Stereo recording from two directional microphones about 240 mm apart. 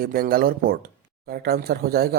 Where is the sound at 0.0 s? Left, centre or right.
Right.